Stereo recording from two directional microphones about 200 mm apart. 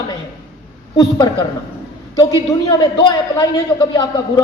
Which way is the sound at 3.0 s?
25° left (ahead or behind).